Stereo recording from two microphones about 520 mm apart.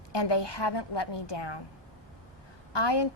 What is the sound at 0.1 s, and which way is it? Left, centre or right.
A woman's voice, left.